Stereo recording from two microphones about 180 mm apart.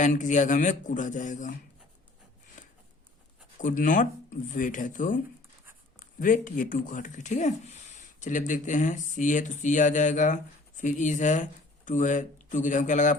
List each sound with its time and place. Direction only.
0.0 s speech: 45° left (ahead or behind)
3.6 s speech: 45° left (ahead or behind)